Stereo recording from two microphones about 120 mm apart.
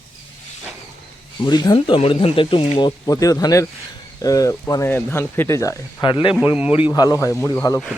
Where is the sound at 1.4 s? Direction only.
35° left (ahead or behind).